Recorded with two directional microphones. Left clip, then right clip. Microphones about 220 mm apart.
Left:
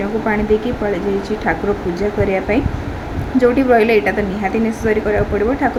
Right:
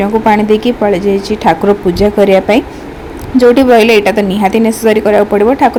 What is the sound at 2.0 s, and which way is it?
A woman's voice, 30° right (ahead or behind).